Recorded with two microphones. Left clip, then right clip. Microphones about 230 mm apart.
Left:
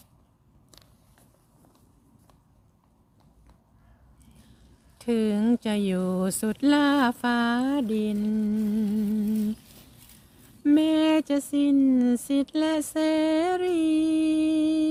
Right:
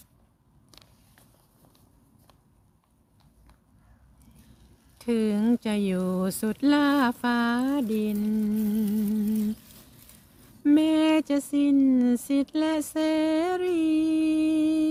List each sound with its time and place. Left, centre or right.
4.9 s speech: centre
8.6 s music: centre
9.3 s humming: right
10.6 s speech: centre